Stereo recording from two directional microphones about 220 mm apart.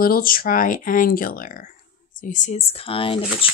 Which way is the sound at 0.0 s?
40° left (ahead or behind).